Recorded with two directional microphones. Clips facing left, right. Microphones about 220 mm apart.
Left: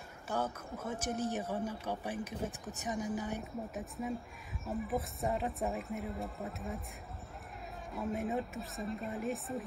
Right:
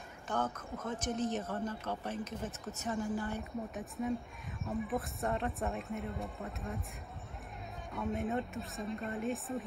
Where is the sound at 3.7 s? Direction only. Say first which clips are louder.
Right 3 dB; centre (ahead or behind).